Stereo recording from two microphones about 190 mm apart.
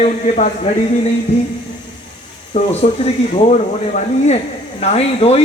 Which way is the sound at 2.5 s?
35° left (ahead or behind).